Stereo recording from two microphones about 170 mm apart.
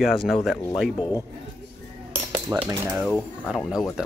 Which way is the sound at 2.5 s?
15° right (ahead or behind).